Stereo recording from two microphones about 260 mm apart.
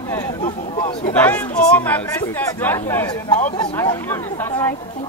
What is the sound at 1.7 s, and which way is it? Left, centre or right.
Speech, centre.